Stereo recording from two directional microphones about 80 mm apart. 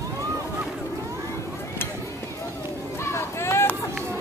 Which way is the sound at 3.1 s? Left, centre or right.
Left.